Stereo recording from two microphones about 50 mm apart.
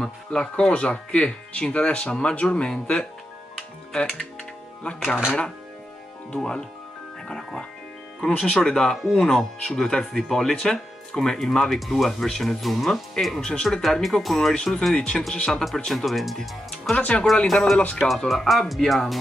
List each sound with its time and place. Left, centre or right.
0.0 s speech: centre
6.3 s speech: centre
15.3 s speech: centre
15.9 s speech: centre
16.9 s speech: left
17.5 s speech: centre